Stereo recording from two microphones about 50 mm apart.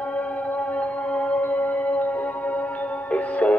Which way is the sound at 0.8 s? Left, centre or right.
Left.